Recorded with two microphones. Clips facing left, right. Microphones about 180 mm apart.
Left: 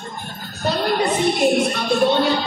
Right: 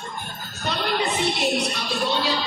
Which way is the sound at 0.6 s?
40° left (ahead or behind).